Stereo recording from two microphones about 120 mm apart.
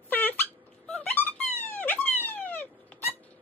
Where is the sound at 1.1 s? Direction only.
15° left (ahead or behind).